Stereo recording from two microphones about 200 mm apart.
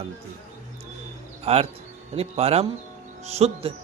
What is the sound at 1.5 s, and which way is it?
Speech, 30° right (ahead or behind).